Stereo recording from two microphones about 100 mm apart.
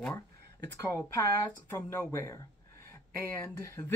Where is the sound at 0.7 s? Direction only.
30° left (ahead or behind).